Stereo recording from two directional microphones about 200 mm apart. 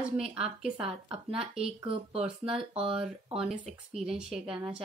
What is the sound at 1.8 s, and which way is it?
Speech, 30° right (ahead or behind).